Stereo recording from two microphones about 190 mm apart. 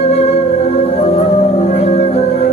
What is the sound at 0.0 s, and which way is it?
Music, 30° left (ahead or behind).